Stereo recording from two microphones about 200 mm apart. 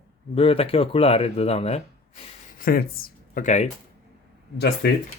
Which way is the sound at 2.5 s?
45° left (ahead or behind).